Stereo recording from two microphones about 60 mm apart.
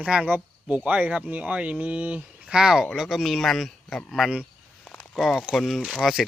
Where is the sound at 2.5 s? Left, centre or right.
Centre.